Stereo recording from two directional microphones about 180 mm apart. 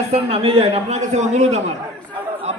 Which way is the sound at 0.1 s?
30° right (ahead or behind).